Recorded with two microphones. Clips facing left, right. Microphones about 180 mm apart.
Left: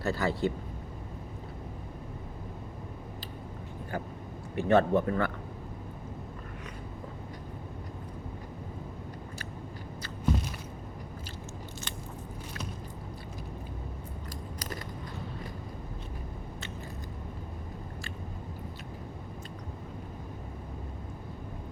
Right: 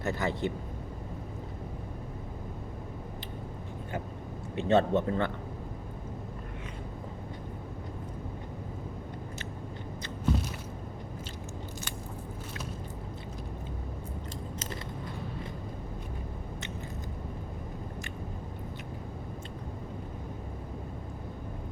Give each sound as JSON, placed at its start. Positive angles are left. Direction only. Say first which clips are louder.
{"t": 0.0, "sound": "speech", "louder": "left 2 dB", "side_deg": -20}
{"t": 4.5, "sound": "speech", "louder": "left 1 dB", "side_deg": -20}